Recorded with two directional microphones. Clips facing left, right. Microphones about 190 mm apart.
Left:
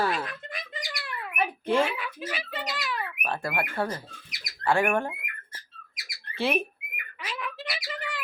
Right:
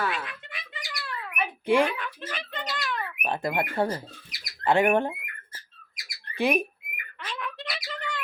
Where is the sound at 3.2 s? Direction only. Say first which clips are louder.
Right 4 dB; 20° right (ahead or behind).